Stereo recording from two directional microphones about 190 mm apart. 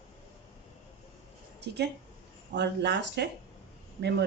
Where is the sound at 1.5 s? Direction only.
60° right (ahead or behind).